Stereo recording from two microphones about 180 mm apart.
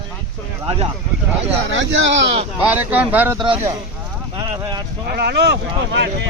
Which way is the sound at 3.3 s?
30° right (ahead or behind).